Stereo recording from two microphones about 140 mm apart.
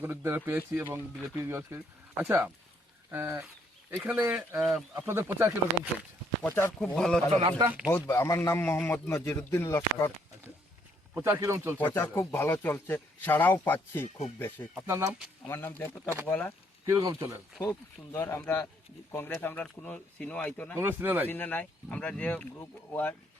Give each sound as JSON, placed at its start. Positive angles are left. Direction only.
{"t": 0.0, "sound": "speech", "side_deg": -15}
{"t": 5.0, "sound": "speech", "side_deg": -15}
{"t": 6.4, "sound": "a man's voice", "side_deg": 15}
{"t": 6.7, "sound": "speech", "side_deg": 5}
{"t": 7.9, "sound": "a man's voice", "side_deg": 20}
{"t": 11.1, "sound": "speech", "side_deg": -15}
{"t": 11.9, "sound": "a man's voice", "side_deg": 15}
{"t": 14.8, "sound": "speech", "side_deg": -20}
{"t": 15.4, "sound": "a man's voice", "side_deg": 15}
{"t": 16.8, "sound": "speech", "side_deg": -25}
{"t": 17.6, "sound": "a man's voice", "side_deg": 20}
{"t": 20.7, "sound": "speech", "side_deg": -15}
{"t": 21.2, "sound": "a man's voice", "side_deg": 15}